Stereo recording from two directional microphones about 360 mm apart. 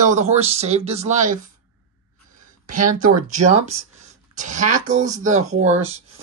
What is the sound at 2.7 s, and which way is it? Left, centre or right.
A woman's voice, right.